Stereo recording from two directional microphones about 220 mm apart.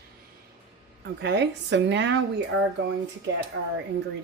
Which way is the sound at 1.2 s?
50° right (ahead or behind).